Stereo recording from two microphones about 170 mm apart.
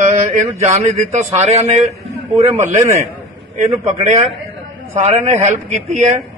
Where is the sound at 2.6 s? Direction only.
15° right (ahead or behind).